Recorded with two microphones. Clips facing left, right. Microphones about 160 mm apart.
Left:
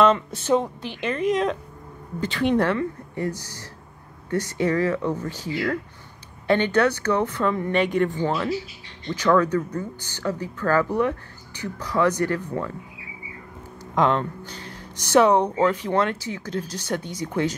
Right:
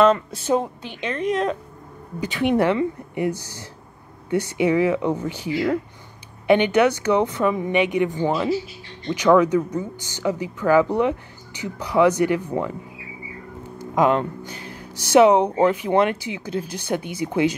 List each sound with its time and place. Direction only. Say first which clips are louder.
0.0 s a woman's voice: right 2 dB; centre (ahead or behind)
2.1 s speech: right 1 dB; 10° right (ahead or behind)
13.9 s speech: right 2 dB; 10° right (ahead or behind)